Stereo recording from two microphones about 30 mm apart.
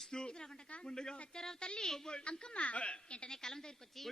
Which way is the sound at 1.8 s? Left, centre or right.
Centre.